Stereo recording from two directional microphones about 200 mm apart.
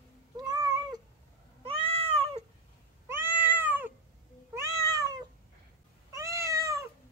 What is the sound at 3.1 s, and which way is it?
Cat, 10° right (ahead or behind).